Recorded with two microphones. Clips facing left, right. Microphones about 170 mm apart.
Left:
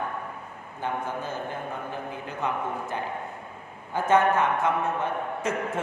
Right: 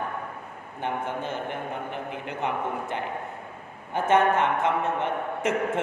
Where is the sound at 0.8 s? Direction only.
20° right (ahead or behind).